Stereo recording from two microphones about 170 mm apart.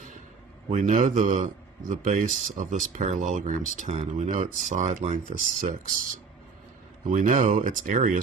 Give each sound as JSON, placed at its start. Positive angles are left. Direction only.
{"t": 0.7, "sound": "speech", "side_deg": -50}
{"t": 7.1, "sound": "speech", "side_deg": -50}